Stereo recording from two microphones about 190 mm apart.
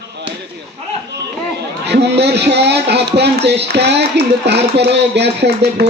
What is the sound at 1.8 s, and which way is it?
A man's voice, 60° right (ahead or behind).